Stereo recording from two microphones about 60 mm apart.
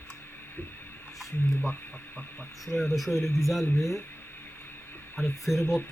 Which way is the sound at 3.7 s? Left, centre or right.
Centre.